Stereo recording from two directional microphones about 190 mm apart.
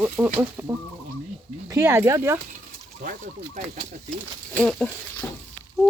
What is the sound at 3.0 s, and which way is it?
Speech, 45° right (ahead or behind).